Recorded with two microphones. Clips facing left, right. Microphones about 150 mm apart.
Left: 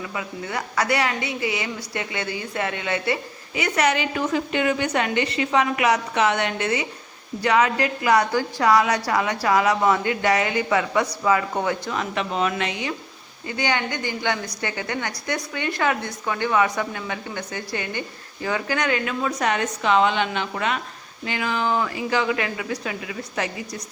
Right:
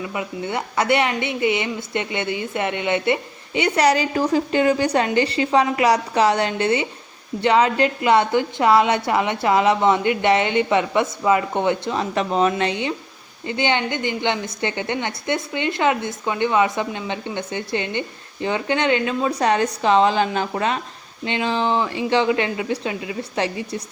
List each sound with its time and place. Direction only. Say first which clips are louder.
0.0 s a woman's voice: right 4 dB; 20° right (ahead or behind)